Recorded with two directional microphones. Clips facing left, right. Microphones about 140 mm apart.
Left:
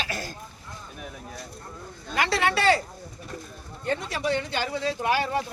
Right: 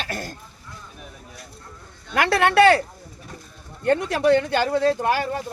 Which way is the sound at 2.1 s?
60° right (ahead or behind).